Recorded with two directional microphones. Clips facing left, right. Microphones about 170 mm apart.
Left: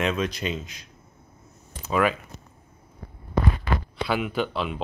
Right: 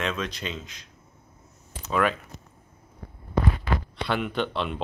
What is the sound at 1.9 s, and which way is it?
Speech, 5° left (ahead or behind).